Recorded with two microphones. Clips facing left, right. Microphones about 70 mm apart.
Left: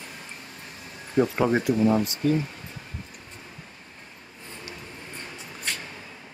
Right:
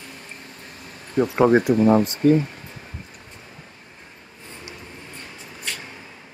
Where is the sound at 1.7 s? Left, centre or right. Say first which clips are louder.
Right 5 dB; right.